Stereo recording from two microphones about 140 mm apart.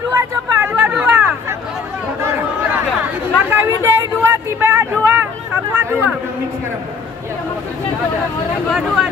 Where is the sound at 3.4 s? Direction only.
15° right (ahead or behind).